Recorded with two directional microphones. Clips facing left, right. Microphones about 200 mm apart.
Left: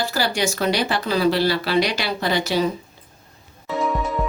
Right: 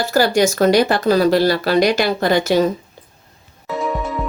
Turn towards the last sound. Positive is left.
turn(degrees=0)  # may be behind; listen again after turning